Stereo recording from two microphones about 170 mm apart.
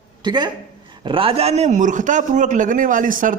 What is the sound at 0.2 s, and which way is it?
A woman's voice, 25° right (ahead or behind).